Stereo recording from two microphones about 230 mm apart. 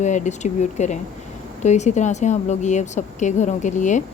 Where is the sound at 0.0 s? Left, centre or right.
Left.